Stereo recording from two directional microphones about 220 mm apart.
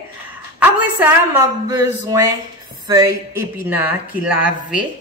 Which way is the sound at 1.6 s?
15° right (ahead or behind).